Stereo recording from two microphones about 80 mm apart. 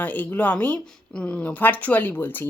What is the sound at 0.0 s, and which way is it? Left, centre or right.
A woman's voice, left.